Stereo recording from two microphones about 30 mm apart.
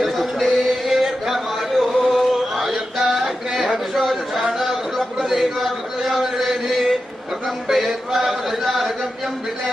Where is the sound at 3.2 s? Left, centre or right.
Centre.